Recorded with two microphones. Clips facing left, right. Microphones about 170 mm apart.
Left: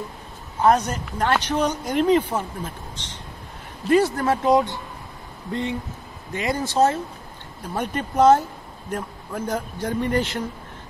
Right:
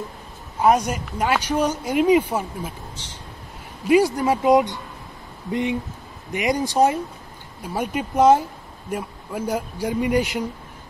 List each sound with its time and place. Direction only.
0.6 s a woman's voice: 10° right (ahead or behind)